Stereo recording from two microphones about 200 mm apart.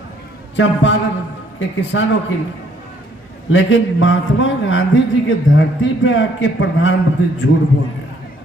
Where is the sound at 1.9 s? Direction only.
70° left (ahead or behind).